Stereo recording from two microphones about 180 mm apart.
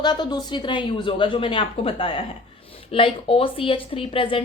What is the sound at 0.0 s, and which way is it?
A woman's voice, 25° left (ahead or behind).